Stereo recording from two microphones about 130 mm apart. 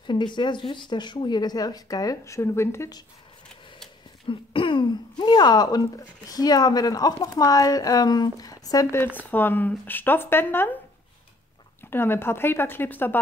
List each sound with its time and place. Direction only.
0.0 s speech: 35° left (ahead or behind); by 3.0 s 20° left (ahead or behind)
4.3 s speech: 40° left (ahead or behind)
8.9 s speech: 15° left (ahead or behind)
11.9 s speech: 15° left (ahead or behind)